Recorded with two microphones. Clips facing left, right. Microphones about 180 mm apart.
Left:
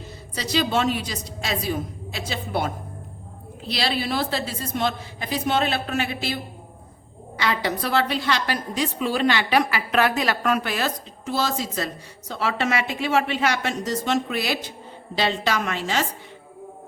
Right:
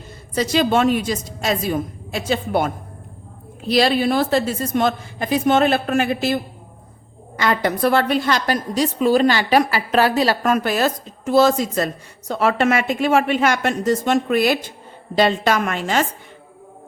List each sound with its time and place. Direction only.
0.3 s a woman's voice: 50° right (ahead or behind); by 10.5 s 35° right (ahead or behind)
10.5 s a woman's voice: 45° right (ahead or behind)